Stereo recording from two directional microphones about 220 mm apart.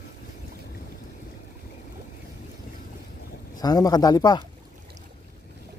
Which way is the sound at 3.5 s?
15° left (ahead or behind).